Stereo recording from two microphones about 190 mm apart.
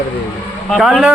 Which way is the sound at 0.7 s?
Centre (ahead or behind).